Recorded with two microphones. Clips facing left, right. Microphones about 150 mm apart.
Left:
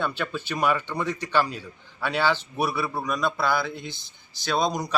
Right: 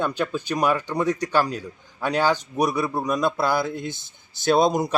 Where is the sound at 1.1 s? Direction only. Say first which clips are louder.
Right 2 dB; 40° right (ahead or behind).